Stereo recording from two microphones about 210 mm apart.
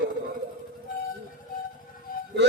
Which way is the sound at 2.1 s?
40° left (ahead or behind).